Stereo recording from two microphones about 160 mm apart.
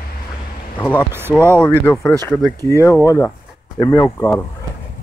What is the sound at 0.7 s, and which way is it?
Speech, 10° left (ahead or behind).